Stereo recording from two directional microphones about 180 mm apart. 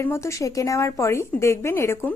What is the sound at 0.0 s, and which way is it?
A woman's voice, 15° left (ahead or behind).